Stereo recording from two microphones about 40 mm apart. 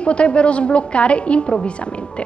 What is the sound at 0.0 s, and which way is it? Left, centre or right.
A woman's voice, left.